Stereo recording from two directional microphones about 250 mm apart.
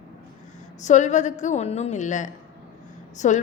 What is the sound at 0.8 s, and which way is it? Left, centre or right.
A woman's voice, left.